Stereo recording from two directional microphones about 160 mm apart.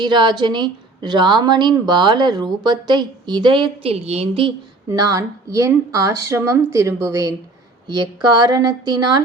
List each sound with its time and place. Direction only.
0.0 s a woman's voice: 30° right (ahead or behind)
4.9 s a woman's voice: 20° right (ahead or behind)